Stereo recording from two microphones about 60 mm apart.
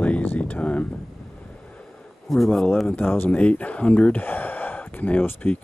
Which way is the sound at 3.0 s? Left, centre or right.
Left.